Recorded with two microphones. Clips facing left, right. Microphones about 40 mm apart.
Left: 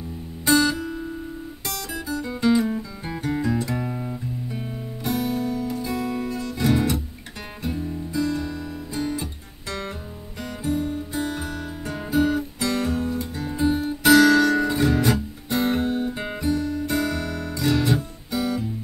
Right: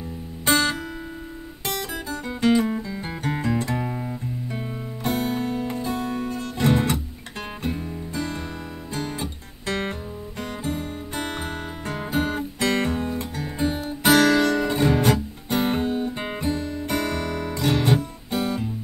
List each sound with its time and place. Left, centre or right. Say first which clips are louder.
0.5 s music: left 2 dB; right
1.7 s guitar: right 1 dB; right
3.3 s music: left 1 dB; right
3.9 s guitar: even; centre
5.0 s music: even; right
8.1 s music: left 5 dB; right
15.5 s guitar: even; right
15.8 s music: left 1 dB; centre
16.3 s music: left 5 dB; right